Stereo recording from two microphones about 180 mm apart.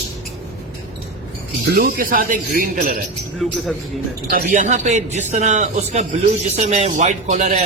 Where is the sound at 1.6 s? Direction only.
65° right (ahead or behind).